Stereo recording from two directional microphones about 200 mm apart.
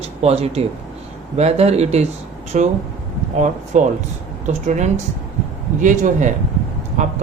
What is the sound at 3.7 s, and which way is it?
Speech, 35° right (ahead or behind).